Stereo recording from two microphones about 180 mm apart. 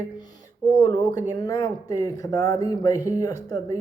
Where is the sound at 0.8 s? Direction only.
25° left (ahead or behind).